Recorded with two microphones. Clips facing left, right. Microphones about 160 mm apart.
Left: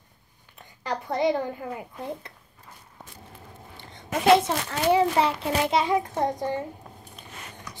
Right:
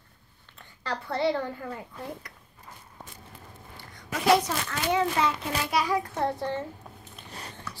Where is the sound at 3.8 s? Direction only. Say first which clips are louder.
Left 5 dB; 25° left (ahead or behind).